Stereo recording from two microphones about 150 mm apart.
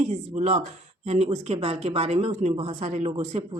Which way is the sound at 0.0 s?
50° right (ahead or behind).